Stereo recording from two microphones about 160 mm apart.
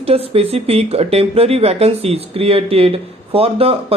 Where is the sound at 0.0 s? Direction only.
40° right (ahead or behind).